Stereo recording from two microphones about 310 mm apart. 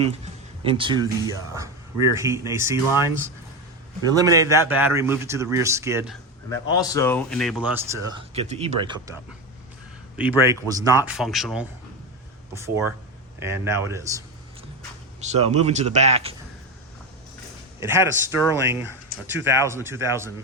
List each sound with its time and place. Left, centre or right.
0.6 s a man's voice: centre
4.1 s a man's voice: centre
6.5 s speech: centre
8.3 s speech: centre
10.2 s a man's voice: centre
15.2 s speech: right
17.7 s a man's voice: centre